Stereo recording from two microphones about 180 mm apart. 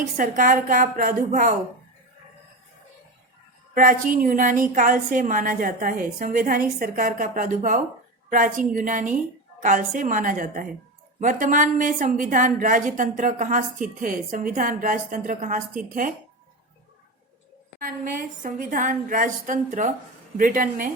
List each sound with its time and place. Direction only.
0.2 s a woman's voice: 50° right (ahead or behind)
3.8 s a woman's voice: 50° right (ahead or behind)
17.7 s a woman's voice: 50° right (ahead or behind)